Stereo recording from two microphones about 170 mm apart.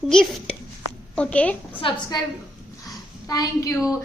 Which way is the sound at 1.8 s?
25° left (ahead or behind).